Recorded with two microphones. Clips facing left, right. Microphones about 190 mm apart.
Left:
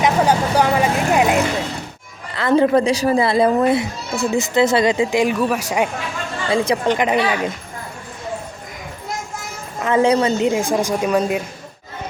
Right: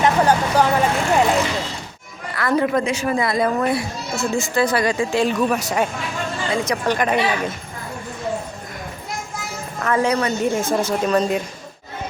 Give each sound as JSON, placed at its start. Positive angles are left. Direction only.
{"t": 0.0, "sound": "speech", "side_deg": 10}
{"t": 2.3, "sound": "speech", "side_deg": 25}
{"t": 6.5, "sound": "speech", "side_deg": 25}
{"t": 9.8, "sound": "speech", "side_deg": 25}
{"t": 10.5, "sound": "speech", "side_deg": 15}